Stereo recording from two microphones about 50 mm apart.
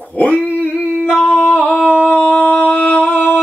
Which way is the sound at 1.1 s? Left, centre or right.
Left.